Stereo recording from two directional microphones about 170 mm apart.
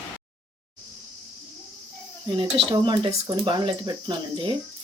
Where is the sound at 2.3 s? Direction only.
30° right (ahead or behind).